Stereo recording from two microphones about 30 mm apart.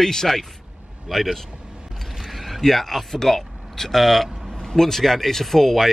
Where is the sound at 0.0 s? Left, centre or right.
Centre.